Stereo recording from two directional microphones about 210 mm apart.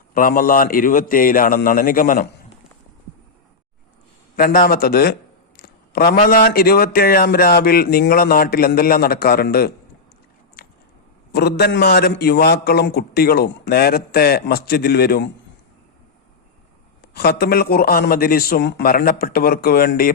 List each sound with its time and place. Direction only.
0.1 s a man's voice: 40° left (ahead or behind)
4.4 s speech: 40° left (ahead or behind)
10.6 s a sound: 45° left (ahead or behind)
11.3 s speech: 50° left (ahead or behind)
17.2 s speech: 50° left (ahead or behind)